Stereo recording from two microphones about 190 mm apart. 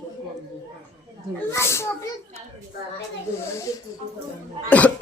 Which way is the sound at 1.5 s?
15° left (ahead or behind).